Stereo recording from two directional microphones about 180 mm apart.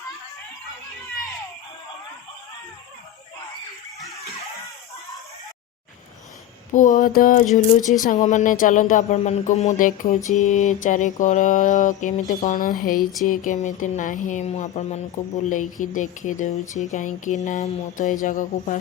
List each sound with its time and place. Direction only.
6.7 s speech: 45° left (ahead or behind)